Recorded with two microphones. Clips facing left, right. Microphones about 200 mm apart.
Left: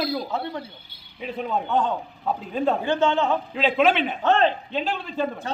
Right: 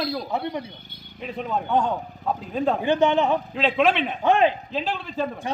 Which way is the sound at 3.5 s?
Centre (ahead or behind).